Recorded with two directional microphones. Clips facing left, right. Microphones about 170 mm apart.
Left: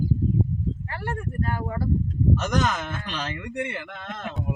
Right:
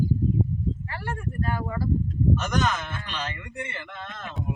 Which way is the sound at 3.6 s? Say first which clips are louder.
Left 4 dB; 75° left (ahead or behind).